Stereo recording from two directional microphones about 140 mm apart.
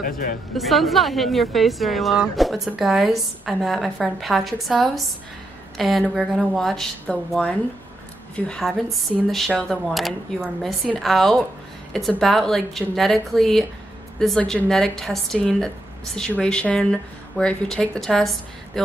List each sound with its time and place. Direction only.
0.0 s speech: 90° left
0.6 s a woman's voice: centre (ahead or behind)